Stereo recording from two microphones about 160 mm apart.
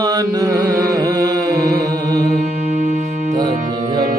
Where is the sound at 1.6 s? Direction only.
75° right (ahead or behind).